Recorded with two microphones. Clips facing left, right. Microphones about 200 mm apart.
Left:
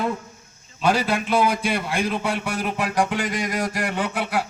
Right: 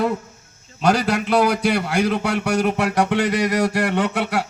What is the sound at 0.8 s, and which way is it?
A man's voice, 75° right (ahead or behind).